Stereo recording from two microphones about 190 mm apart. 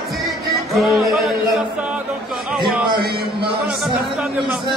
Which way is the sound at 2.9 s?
55° right (ahead or behind).